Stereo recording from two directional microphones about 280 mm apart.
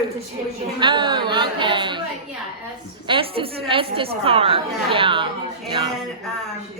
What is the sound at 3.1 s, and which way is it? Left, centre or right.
A woman's voice, centre.